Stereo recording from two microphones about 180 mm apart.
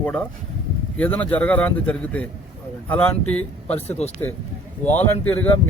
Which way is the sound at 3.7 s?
35° left (ahead or behind).